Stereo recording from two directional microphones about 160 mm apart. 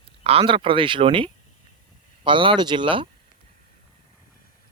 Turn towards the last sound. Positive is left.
turn(degrees=-30)  # may be behind; listen again after turning